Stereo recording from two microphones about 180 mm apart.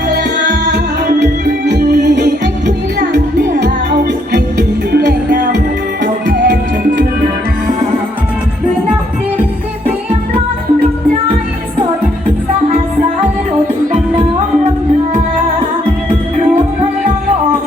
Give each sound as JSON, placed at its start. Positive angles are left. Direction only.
{"t": 1.6, "sound": "music", "side_deg": -70}
{"t": 4.9, "sound": "music", "side_deg": -60}
{"t": 6.2, "sound": "music", "side_deg": -50}